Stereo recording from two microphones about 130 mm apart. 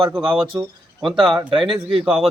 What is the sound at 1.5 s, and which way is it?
Speech, 40° right (ahead or behind).